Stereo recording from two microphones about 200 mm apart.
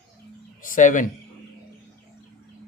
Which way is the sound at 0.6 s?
40° left (ahead or behind).